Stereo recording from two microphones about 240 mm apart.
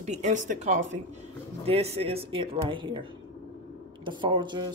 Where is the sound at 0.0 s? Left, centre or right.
Right.